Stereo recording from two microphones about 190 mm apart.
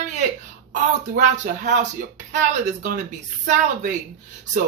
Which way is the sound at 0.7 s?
40° right (ahead or behind).